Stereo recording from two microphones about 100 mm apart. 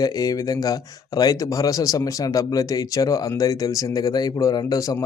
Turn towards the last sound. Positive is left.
turn(degrees=35)  # may be behind; listen again after turning